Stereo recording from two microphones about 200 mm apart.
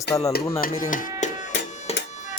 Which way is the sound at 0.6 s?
45° left (ahead or behind).